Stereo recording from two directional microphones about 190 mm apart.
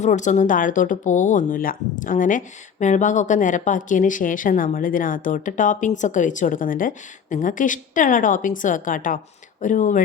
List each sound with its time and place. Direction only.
0.0 s speech: 40° left (ahead or behind)